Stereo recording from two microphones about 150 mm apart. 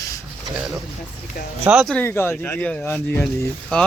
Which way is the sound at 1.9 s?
15° left (ahead or behind).